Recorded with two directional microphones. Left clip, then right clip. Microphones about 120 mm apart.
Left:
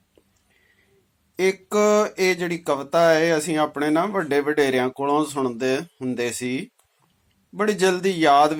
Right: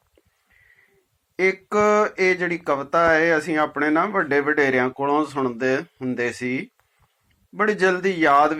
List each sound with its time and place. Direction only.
1.4 s speech: 30° left (ahead or behind)